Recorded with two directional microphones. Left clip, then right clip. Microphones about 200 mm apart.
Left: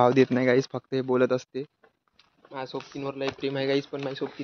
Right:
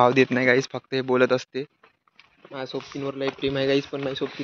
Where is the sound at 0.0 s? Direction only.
10° left (ahead or behind).